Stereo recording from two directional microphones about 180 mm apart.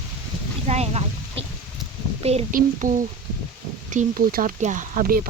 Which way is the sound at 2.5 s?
45° right (ahead or behind).